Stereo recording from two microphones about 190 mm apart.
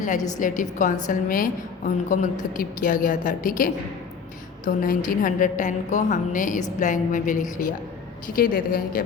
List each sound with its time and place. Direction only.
0.3 s a woman's voice: 40° left (ahead or behind)